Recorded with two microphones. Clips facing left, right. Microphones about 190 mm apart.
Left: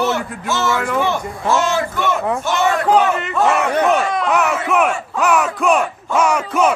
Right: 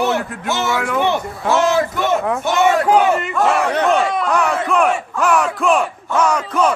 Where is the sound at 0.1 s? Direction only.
Centre (ahead or behind).